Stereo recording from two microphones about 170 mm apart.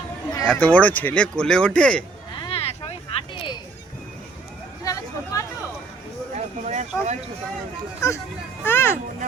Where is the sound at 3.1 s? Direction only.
35° left (ahead or behind).